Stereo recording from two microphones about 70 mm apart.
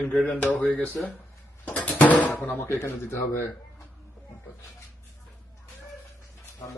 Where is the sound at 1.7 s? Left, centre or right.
Left.